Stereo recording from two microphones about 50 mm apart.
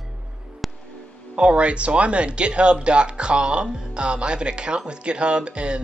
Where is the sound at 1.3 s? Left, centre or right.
Right.